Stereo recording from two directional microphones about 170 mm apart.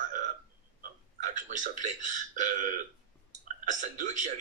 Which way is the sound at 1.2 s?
50° right (ahead or behind).